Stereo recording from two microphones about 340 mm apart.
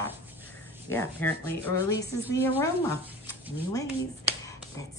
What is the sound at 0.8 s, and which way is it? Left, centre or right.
Speech, centre.